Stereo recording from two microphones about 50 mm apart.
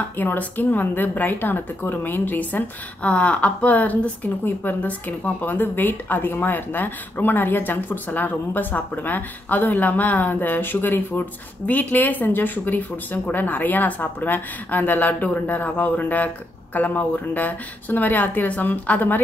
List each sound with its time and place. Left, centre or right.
0.2 s a woman's voice: left